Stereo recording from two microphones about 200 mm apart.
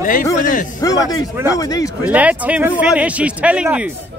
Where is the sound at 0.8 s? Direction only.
20° left (ahead or behind).